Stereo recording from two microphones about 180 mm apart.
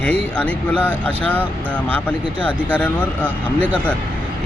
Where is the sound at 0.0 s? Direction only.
10° left (ahead or behind).